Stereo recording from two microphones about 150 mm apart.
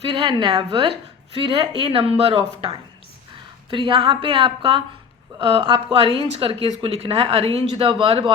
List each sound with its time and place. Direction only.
0.0 s speech: 35° right (ahead or behind)
3.7 s speech: 35° right (ahead or behind)